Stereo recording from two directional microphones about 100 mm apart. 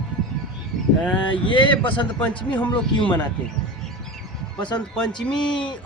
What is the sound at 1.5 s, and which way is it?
Speech, 50° left (ahead or behind).